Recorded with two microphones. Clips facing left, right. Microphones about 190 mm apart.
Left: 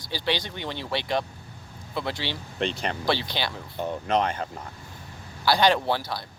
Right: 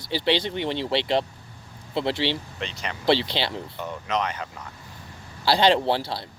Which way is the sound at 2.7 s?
30° left (ahead or behind).